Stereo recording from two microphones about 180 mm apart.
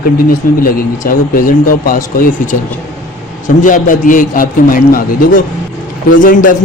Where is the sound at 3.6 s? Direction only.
45° left (ahead or behind).